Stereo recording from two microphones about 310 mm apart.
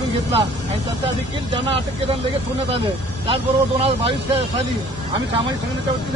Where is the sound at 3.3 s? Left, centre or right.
Centre.